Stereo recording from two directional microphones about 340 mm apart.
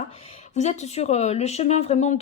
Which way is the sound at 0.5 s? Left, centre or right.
Centre.